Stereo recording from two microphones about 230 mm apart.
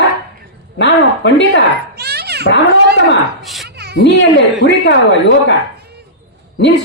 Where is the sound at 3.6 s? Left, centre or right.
Right.